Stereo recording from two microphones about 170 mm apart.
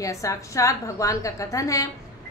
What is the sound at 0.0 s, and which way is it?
A woman's voice, 20° left (ahead or behind).